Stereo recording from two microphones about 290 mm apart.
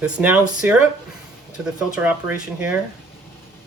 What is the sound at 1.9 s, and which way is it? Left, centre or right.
Speech, centre.